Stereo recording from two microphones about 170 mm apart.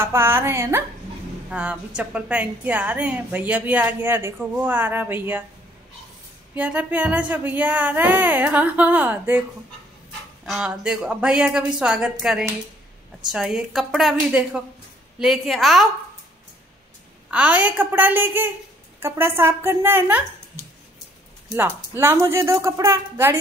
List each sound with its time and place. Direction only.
0.0 s a woman's voice: 15° right (ahead or behind)
6.5 s a woman's voice: 10° right (ahead or behind)
10.4 s speech: 5° right (ahead or behind)
15.1 s speech: centre (ahead or behind)
17.3 s a woman's voice: 5° right (ahead or behind)
21.5 s a woman's voice: 15° right (ahead or behind)